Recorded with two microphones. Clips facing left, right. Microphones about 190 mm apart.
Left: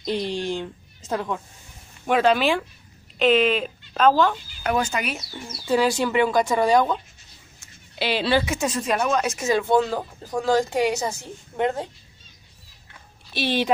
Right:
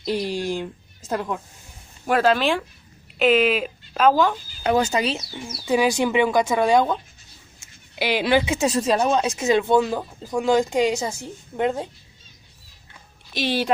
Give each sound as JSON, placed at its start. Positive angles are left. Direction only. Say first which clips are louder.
{"t": 0.0, "sound": "a woman's voice", "louder": "right 1 dB", "side_deg": -10}
{"t": 4.8, "sound": "speech", "louder": "right 5 dB", "side_deg": -35}
{"t": 5.1, "sound": "a woman's voice", "louder": "right 3 dB", "side_deg": -15}
{"t": 7.9, "sound": "a woman's voice", "louder": "right 2 dB", "side_deg": -15}
{"t": 8.5, "sound": "a woman's voice", "louder": "right 4 dB", "side_deg": -30}
{"t": 13.3, "sound": "a woman's voice", "louder": "even", "side_deg": -15}